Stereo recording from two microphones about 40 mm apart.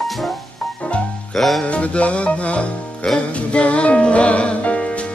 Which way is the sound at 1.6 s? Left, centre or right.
Left.